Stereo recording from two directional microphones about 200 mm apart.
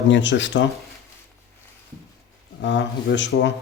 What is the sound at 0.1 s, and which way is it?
Speech, 65° left (ahead or behind).